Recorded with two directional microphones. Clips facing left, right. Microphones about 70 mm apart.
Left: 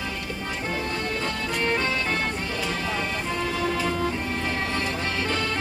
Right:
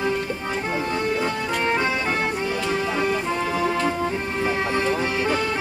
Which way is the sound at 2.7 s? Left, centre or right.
Right.